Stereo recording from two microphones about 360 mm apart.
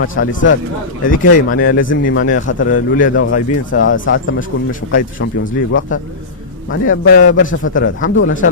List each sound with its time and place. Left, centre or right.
0.0 s speech: left
2.2 s a man's voice: left